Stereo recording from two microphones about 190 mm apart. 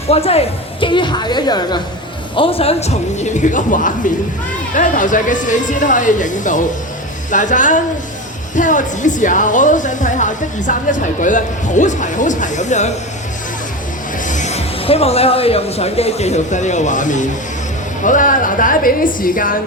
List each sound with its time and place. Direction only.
0.1 s a woman's voice: 30° left (ahead or behind)
14.3 s speech: 40° left (ahead or behind)